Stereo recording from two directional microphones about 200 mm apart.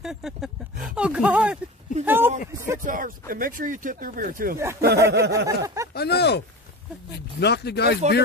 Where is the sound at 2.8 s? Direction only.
45° right (ahead or behind).